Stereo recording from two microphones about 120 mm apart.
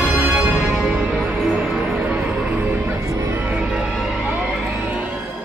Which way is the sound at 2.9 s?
30° right (ahead or behind).